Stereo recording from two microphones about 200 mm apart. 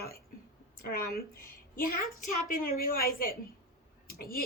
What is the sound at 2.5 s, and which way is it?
A woman's voice, 45° left (ahead or behind).